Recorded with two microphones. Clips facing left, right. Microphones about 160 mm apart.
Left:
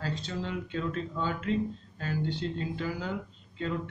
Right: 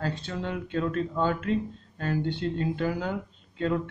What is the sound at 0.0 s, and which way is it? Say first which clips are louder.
Speech: right 3 dB; 55° right (ahead or behind).